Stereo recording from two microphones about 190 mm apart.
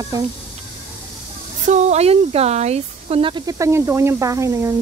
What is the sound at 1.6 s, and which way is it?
Speech, 40° right (ahead or behind).